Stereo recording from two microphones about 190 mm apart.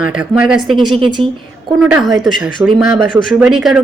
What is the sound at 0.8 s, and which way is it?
Speech, 25° right (ahead or behind).